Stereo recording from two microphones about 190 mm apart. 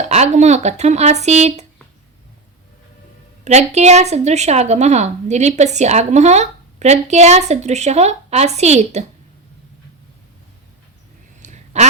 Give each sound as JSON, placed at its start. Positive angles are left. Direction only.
{"t": 0.1, "sound": "a woman's voice", "side_deg": -35}
{"t": 3.4, "sound": "a woman's voice", "side_deg": -35}
{"t": 11.3, "sound": "a sound", "side_deg": -40}